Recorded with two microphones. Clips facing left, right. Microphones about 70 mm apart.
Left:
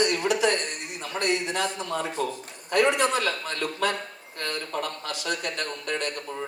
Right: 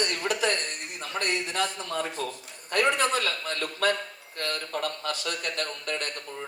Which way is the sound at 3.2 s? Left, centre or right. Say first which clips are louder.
Left 2 dB; left.